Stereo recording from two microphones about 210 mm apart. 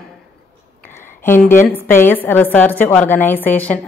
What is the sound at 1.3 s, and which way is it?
Speech, 35° left (ahead or behind).